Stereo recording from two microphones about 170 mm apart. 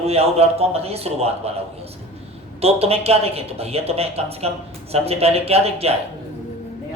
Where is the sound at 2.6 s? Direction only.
35° right (ahead or behind).